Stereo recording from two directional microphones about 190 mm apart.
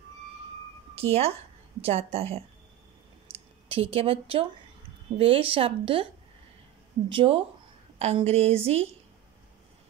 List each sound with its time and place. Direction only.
0.9 s a woman's voice: 30° right (ahead or behind)
7.1 s a woman's voice: 30° right (ahead or behind)